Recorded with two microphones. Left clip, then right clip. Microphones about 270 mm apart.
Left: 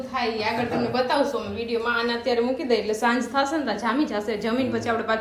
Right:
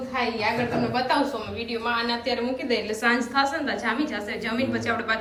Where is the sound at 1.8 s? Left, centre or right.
Centre.